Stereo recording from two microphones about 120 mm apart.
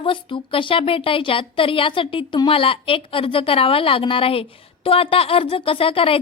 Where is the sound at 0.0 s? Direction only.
45° left (ahead or behind).